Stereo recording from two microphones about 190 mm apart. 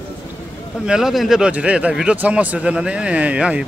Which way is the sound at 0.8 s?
5° right (ahead or behind).